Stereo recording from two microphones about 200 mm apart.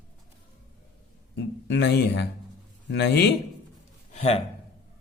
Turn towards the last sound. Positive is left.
turn(degrees=35)  # may be behind; listen again after turning